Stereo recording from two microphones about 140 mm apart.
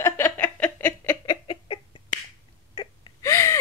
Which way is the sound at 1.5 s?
35° left (ahead or behind).